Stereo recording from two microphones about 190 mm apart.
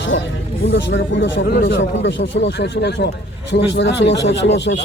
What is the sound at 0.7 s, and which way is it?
Speech, 70° left (ahead or behind).